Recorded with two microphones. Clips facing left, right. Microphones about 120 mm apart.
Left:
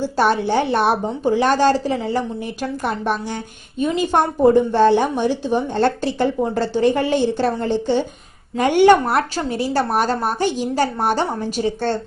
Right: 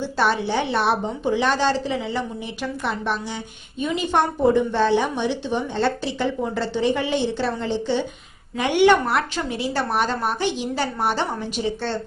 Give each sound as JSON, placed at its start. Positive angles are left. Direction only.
{"t": 0.0, "sound": "a woman's voice", "side_deg": 45}